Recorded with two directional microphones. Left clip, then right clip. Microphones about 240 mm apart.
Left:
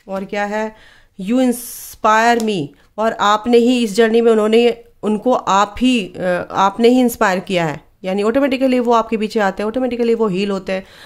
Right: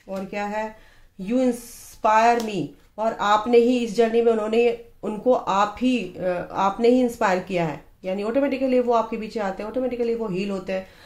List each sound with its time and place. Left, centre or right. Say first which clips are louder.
0.1 s speech: left 7 dB; left